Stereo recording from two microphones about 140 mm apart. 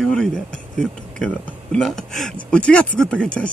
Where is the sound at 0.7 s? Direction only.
5° left (ahead or behind).